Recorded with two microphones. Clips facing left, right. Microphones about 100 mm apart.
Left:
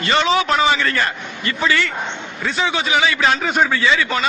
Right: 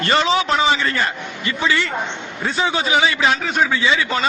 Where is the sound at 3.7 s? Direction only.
15° right (ahead or behind).